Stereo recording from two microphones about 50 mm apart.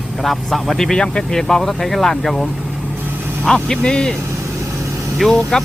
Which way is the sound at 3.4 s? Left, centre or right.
Centre.